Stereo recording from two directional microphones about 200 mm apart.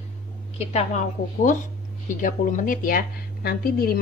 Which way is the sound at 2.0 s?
40° left (ahead or behind).